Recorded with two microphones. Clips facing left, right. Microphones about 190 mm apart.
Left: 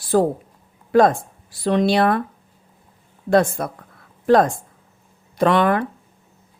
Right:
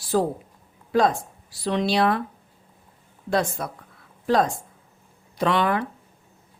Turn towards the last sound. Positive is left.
turn(degrees=50)  # may be behind; listen again after turning